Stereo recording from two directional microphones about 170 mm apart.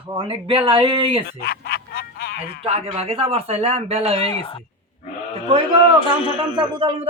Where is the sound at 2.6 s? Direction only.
40° right (ahead or behind).